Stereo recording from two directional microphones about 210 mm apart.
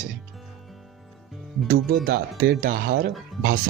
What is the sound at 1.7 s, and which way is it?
Speech, 45° right (ahead or behind).